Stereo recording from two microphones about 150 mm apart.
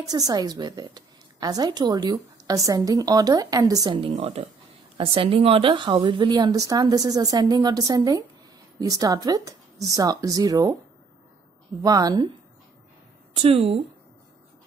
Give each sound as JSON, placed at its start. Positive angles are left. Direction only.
{"t": 0.0, "sound": "a woman's voice", "side_deg": -25}
{"t": 4.1, "sound": "a woman's voice", "side_deg": -45}
{"t": 11.8, "sound": "a woman's voice", "side_deg": -25}
{"t": 13.3, "sound": "a woman's voice", "side_deg": -40}